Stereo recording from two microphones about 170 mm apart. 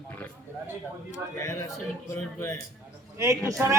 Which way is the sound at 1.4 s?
15° left (ahead or behind).